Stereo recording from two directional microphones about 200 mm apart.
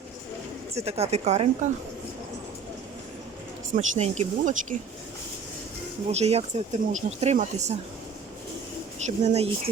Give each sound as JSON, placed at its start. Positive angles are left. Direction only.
{"t": 0.9, "sound": "speech", "side_deg": -30}
{"t": 3.8, "sound": "speech", "side_deg": -35}
{"t": 6.1, "sound": "speech", "side_deg": -30}
{"t": 9.0, "sound": "speech", "side_deg": -30}